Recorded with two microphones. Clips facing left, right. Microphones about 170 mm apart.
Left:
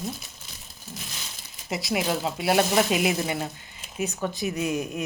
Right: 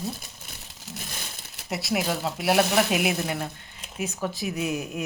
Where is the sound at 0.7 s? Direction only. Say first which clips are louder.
Even; 85° right.